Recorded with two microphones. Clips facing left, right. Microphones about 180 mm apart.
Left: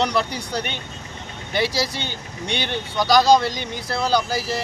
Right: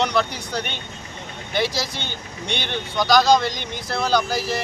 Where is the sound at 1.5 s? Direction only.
10° left (ahead or behind).